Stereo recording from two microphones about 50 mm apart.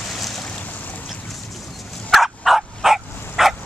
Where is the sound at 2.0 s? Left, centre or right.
Centre.